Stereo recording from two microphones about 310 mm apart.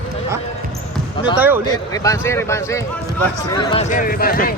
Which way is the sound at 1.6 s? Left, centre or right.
Centre.